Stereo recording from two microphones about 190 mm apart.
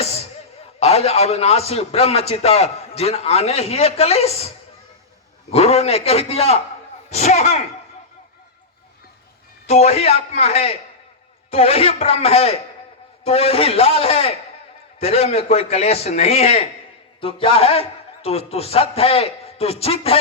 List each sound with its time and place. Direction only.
0.8 s a man's voice: 35° left (ahead or behind)
9.6 s a man's voice: 35° left (ahead or behind)